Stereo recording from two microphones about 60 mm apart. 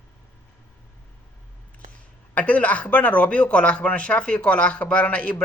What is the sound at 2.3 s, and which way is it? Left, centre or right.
A man's voice, left.